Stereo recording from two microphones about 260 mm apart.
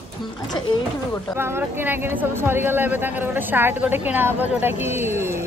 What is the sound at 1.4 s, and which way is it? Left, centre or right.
Speech, centre.